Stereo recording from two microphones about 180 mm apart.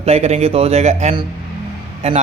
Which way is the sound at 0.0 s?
35° right (ahead or behind).